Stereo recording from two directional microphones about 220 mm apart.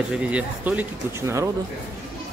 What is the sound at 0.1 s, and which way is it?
Speech, 5° right (ahead or behind).